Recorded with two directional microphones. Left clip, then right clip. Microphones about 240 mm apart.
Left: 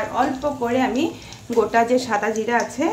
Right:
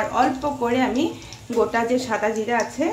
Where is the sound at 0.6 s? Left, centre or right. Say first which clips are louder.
Even; centre.